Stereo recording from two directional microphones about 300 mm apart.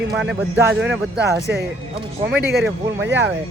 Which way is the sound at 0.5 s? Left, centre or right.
Centre.